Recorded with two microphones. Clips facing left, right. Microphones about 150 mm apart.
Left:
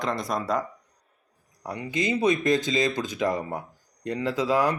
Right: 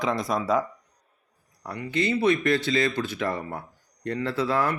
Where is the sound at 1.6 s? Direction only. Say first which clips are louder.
Right 1 dB; 20° left (ahead or behind).